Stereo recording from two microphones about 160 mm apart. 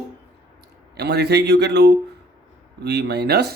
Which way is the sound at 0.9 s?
90° right.